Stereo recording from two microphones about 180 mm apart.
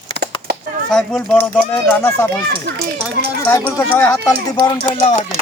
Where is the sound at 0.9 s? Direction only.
5° left (ahead or behind).